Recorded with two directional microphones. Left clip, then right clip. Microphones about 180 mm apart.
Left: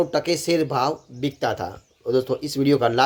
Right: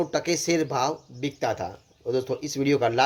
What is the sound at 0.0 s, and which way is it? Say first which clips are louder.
Speech: left 4 dB; 15° left (ahead or behind).